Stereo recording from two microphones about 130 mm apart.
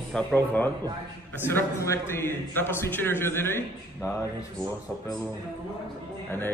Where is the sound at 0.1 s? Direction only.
15° left (ahead or behind).